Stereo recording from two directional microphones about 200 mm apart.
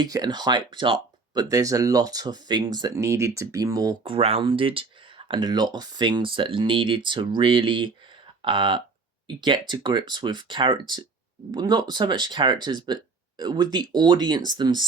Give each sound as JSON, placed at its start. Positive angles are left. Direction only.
{"t": 0.0, "sound": "speech", "side_deg": -20}